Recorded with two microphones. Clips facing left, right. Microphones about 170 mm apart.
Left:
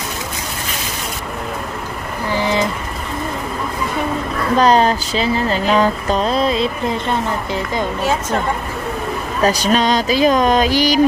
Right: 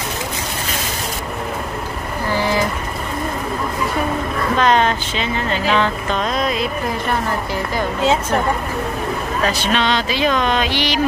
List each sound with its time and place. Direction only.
2.3 s vehicle: 20° left (ahead or behind)
4.6 s speech: 35° left (ahead or behind)
9.4 s speech: 40° left (ahead or behind)